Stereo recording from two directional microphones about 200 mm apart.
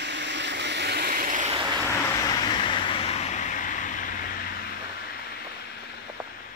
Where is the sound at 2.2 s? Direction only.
25° left (ahead or behind).